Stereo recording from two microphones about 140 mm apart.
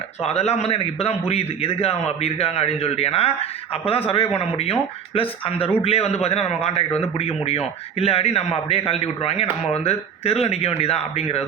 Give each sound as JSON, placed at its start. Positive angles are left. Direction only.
{"t": 0.3, "sound": "a man's voice", "side_deg": 50}